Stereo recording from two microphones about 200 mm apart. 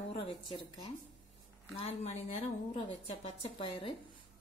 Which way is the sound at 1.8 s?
30° left (ahead or behind).